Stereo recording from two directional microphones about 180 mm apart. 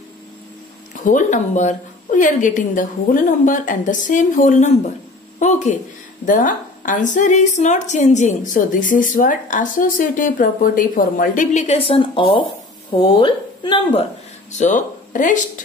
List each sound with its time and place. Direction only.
1.0 s a woman's voice: 45° left (ahead or behind); by 14.0 s 30° left (ahead or behind)
14.6 s speech: 45° left (ahead or behind)